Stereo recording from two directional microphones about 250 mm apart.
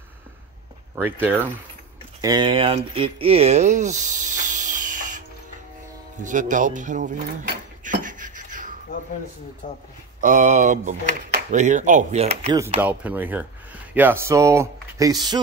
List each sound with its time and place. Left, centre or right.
2.2 s speech: centre
6.2 s a sound: right
9.6 s a man's voice: left
10.2 s speech: right
12.5 s speech: centre